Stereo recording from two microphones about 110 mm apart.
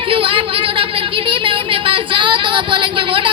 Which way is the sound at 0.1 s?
55° right (ahead or behind).